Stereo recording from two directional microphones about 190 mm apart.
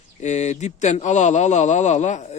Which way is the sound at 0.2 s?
35° left (ahead or behind).